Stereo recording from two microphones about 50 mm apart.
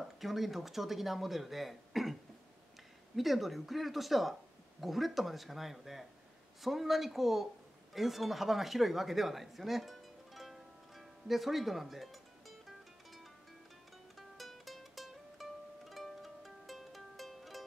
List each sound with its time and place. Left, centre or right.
0.2 s speech: centre
3.2 s speech: centre
14.1 s music: centre